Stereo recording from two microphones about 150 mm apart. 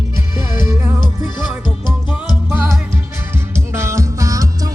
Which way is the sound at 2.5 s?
15° right (ahead or behind).